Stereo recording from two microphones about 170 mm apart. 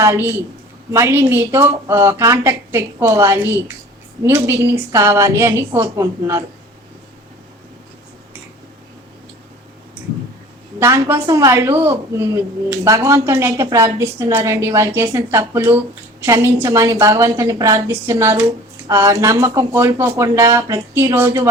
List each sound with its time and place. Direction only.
0.0 s a woman's voice: 15° right (ahead or behind)
10.8 s a woman's voice: 15° right (ahead or behind)